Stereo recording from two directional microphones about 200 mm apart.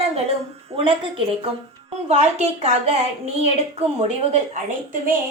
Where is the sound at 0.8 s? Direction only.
25° right (ahead or behind).